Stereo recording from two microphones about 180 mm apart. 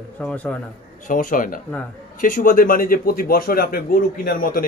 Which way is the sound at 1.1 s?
50° left (ahead or behind).